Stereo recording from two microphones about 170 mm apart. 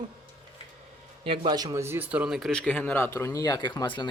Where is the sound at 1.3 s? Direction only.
25° right (ahead or behind).